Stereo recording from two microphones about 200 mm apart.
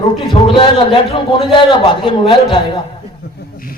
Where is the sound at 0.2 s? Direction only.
25° left (ahead or behind).